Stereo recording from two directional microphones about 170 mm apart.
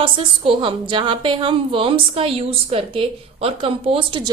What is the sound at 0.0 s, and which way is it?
A woman's voice, 30° right (ahead or behind).